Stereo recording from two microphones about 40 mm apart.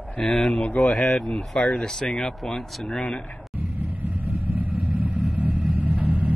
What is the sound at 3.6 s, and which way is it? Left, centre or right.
Vehicle, right.